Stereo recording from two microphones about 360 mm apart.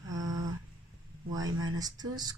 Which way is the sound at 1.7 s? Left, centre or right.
Centre.